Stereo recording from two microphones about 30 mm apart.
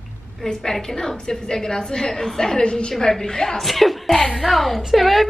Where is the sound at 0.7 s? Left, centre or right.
Centre.